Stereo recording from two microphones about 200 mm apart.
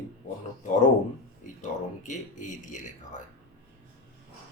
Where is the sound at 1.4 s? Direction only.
40° left (ahead or behind).